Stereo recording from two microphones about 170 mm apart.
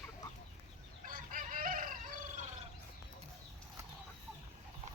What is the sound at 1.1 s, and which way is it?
Chicken, 55° right (ahead or behind).